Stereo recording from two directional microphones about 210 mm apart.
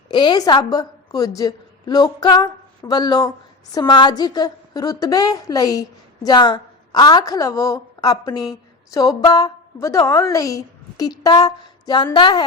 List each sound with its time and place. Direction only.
0.1 s a woman's voice: 20° left (ahead or behind)